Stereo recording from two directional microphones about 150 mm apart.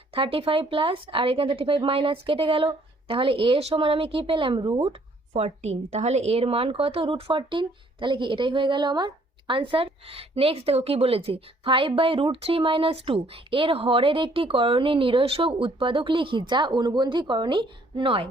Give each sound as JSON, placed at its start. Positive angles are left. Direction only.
{"t": 0.1, "sound": "speech", "side_deg": -40}